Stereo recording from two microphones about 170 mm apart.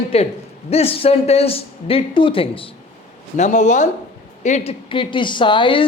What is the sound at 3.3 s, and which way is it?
A man's voice, 45° left (ahead or behind).